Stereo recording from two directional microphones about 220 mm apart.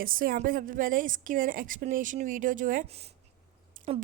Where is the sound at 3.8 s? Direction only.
40° right (ahead or behind).